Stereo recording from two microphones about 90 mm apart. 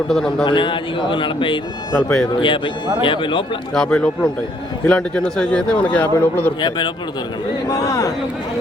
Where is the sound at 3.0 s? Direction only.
65° left (ahead or behind).